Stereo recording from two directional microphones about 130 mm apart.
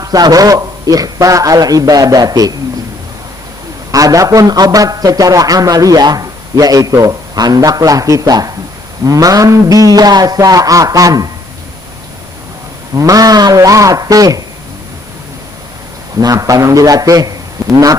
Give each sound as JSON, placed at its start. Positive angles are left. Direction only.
{"t": 0.0, "sound": "a man's voice", "side_deg": -30}
{"t": 3.9, "sound": "a man's voice", "side_deg": -25}
{"t": 12.9, "sound": "a man's voice", "side_deg": -25}
{"t": 16.2, "sound": "a man's voice", "side_deg": -25}